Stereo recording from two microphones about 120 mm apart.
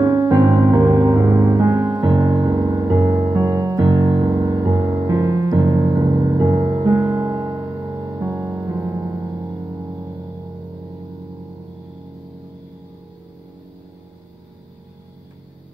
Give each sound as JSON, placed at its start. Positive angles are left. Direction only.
{"t": 0.2, "sound": "music", "side_deg": -35}